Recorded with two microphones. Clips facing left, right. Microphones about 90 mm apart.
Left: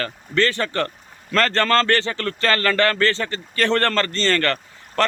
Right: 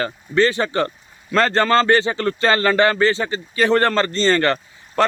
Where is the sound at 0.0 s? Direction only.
15° right (ahead or behind).